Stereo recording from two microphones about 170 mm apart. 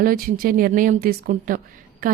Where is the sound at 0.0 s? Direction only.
55° right (ahead or behind).